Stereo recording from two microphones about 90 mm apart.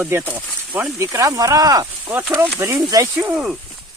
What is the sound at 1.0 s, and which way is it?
Speech, 35° right (ahead or behind).